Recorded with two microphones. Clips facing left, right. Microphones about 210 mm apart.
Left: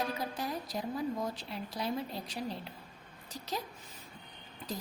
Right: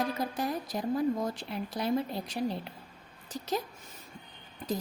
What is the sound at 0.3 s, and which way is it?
A woman's voice, 50° right (ahead or behind).